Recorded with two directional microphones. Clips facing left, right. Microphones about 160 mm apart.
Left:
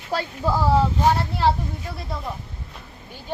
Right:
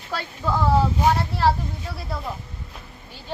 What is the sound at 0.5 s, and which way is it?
Speech, centre (ahead or behind).